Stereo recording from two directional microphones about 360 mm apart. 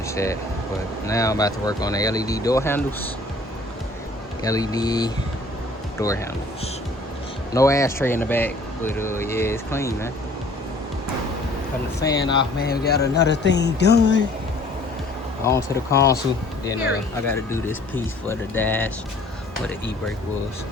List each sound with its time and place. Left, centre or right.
0.1 s speech: centre
4.4 s speech: centre
7.5 s speech: centre
11.9 s speech: centre
12.5 s speech: left
15.4 s speech: centre
17.2 s speech: centre